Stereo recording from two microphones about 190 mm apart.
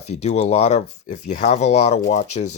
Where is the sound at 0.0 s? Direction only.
35° left (ahead or behind).